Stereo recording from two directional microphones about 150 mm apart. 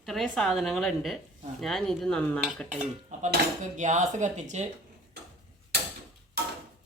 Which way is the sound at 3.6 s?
55° right (ahead or behind).